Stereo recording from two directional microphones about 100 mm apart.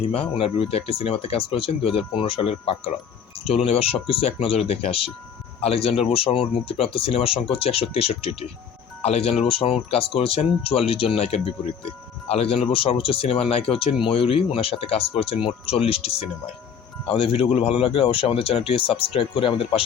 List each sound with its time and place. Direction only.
0.1 s speech: 75° left (ahead or behind)
4.0 s speech: 75° left (ahead or behind); by 9.3 s 90° left
9.4 s speech: 70° left (ahead or behind)
12.3 s speech: 75° left (ahead or behind)